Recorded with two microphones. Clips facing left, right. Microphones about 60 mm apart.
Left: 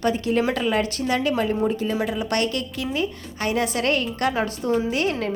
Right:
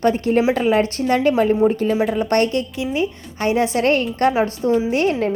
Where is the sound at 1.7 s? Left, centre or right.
Right.